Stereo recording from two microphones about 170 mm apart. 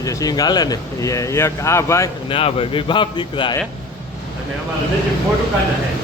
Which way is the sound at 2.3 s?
30° left (ahead or behind).